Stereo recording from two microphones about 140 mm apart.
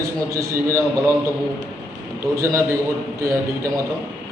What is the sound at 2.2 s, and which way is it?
Speech, 25° right (ahead or behind).